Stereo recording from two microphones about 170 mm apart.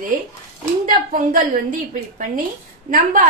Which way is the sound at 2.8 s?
50° right (ahead or behind).